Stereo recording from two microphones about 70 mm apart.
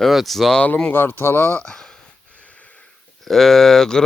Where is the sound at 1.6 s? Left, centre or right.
Centre.